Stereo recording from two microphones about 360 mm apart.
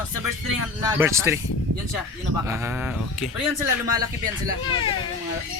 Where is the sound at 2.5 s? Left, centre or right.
Centre.